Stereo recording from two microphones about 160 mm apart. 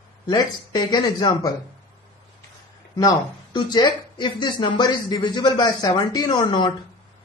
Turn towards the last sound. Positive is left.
turn(degrees=30)  # may be behind; listen again after turning